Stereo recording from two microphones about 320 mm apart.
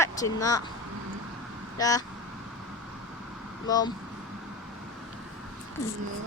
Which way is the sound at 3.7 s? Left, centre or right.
Centre.